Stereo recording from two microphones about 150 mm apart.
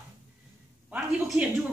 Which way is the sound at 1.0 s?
Centre (ahead or behind).